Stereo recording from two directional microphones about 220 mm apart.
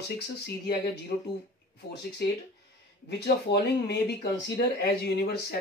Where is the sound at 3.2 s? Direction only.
50° left (ahead or behind).